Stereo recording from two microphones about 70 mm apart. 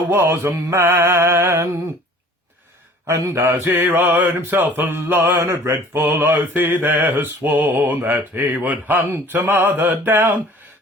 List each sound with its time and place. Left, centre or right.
0.1 s mantra: right
3.3 s mantra: right
3.9 s mantra: right
5.4 s mantra: right